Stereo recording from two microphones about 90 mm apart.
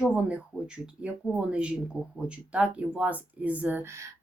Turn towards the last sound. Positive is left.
turn(degrees=-30)  # may be behind; listen again after turning